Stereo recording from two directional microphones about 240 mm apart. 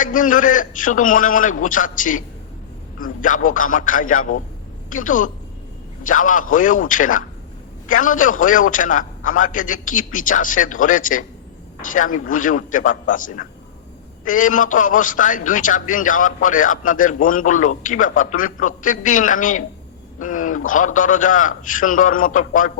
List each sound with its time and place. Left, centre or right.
0.0 s a man's voice: left